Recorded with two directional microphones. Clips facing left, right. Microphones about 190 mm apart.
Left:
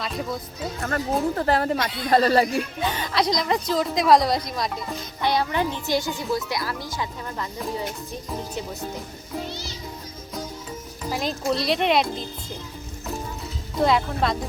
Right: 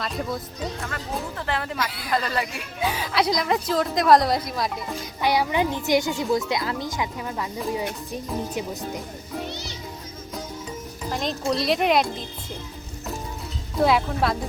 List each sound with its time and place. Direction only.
0.0 s a woman's voice: centre (ahead or behind)
0.8 s speech: 45° left (ahead or behind)
2.8 s a woman's voice: 5° right (ahead or behind)
7.3 s speech: 10° right (ahead or behind)
11.0 s a woman's voice: 5° left (ahead or behind)
13.7 s a woman's voice: 5° right (ahead or behind)